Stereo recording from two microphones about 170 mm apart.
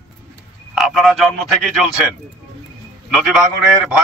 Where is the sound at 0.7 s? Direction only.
Centre (ahead or behind).